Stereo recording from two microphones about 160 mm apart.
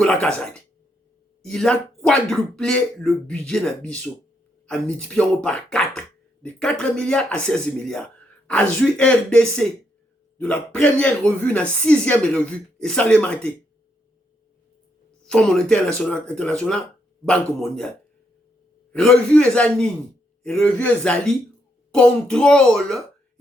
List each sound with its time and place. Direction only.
0.0 s speech: 5° left (ahead or behind)
4.6 s speech: 5° left (ahead or behind)
15.3 s speech: 5° left (ahead or behind)